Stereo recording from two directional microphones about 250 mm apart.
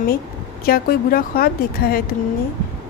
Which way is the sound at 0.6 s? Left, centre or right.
Left.